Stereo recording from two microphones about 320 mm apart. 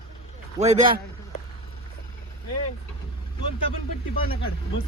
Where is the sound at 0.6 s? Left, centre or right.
Right.